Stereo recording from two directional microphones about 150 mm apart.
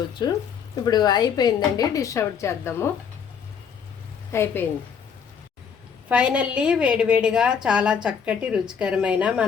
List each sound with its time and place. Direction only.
0.2 s speech: 30° left (ahead or behind)
4.3 s a woman's voice: 15° left (ahead or behind)
6.1 s a woman's voice: 5° right (ahead or behind)